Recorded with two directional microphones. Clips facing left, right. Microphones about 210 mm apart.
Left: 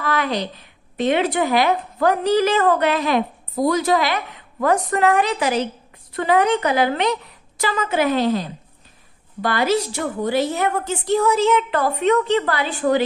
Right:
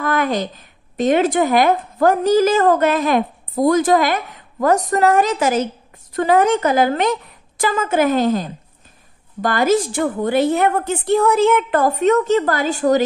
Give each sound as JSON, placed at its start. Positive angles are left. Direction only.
{"t": 0.0, "sound": "speech", "side_deg": -50}